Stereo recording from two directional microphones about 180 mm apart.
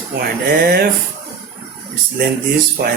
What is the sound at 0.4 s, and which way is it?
Speech, 60° right (ahead or behind).